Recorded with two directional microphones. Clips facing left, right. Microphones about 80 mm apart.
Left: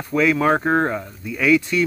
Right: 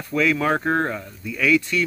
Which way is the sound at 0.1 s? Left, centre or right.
Centre.